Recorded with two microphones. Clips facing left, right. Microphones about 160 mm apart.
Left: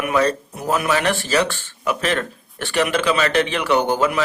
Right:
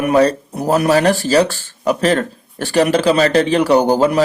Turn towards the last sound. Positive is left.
turn(degrees=-35)  # may be behind; listen again after turning